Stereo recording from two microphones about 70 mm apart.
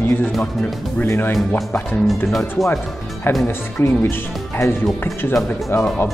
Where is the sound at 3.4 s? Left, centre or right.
Left.